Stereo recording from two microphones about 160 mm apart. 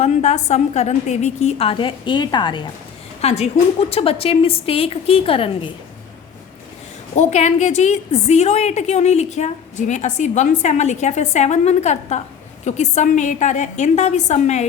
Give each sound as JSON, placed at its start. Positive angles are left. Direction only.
{"t": 0.0, "sound": "a woman's voice", "side_deg": 45}
{"t": 3.2, "sound": "a woman's voice", "side_deg": 40}
{"t": 7.2, "sound": "a woman's voice", "side_deg": 45}